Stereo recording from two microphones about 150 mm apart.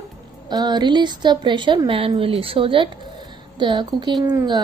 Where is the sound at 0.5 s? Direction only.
30° right (ahead or behind).